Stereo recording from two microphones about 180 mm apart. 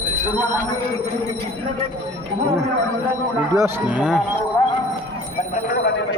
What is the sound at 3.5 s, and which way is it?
Speech, 15° right (ahead or behind).